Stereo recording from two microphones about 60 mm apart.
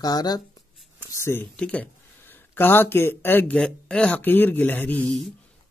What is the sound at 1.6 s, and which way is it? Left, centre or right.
Speech, left.